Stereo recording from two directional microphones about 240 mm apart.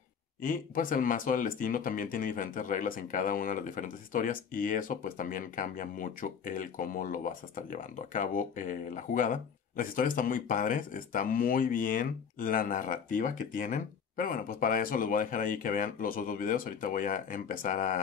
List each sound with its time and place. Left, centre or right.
0.4 s speech: left